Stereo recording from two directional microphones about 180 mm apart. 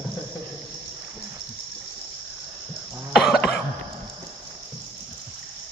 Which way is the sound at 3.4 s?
65° left (ahead or behind).